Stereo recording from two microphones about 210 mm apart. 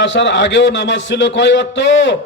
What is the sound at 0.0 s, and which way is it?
A man's voice, 60° left (ahead or behind).